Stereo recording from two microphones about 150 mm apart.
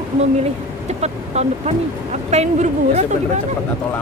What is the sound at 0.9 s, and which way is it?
Speech, 45° right (ahead or behind).